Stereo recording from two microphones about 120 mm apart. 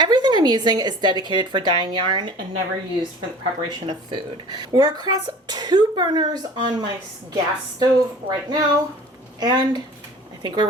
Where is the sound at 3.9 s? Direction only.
40° right (ahead or behind).